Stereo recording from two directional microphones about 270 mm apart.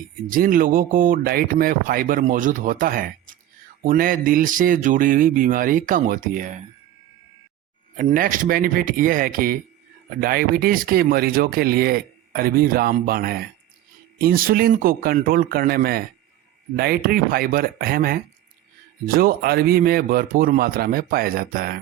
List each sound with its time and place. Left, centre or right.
0.3 s speech: right
7.9 s speech: right